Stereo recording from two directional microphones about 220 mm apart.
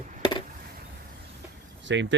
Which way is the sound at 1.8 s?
55° right (ahead or behind).